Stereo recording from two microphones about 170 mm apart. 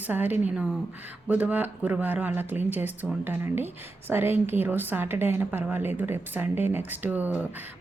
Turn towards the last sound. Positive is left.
turn(degrees=-10)  # may be behind; listen again after turning